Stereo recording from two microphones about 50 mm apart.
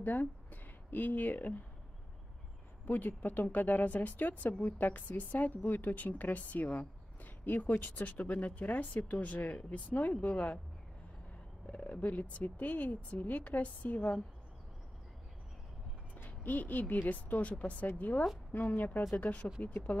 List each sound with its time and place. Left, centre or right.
0.0 s a sound: left
2.8 s speech: left
11.6 s speech: left
16.2 s speech: left